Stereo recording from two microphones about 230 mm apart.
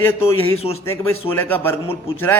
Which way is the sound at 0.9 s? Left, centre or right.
Centre.